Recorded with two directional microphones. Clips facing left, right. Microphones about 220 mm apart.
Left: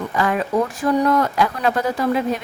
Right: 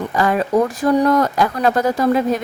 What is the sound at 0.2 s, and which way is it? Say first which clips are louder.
A woman's voice: right 4 dB; 35° right (ahead or behind).